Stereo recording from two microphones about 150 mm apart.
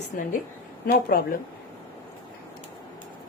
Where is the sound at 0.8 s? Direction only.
75° left (ahead or behind).